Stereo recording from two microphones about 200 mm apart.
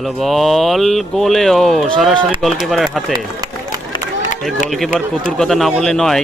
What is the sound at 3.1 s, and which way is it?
Run, 20° right (ahead or behind).